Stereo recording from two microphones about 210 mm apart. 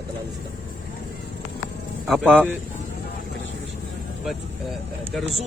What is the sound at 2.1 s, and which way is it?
Speech, 5° right (ahead or behind).